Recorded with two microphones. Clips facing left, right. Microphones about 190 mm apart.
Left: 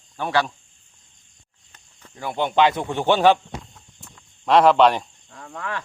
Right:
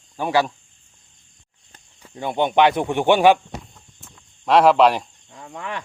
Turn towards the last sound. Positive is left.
turn(degrees=-15)  # may be behind; listen again after turning